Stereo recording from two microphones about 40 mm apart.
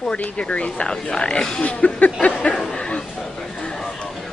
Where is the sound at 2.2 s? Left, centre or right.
Left.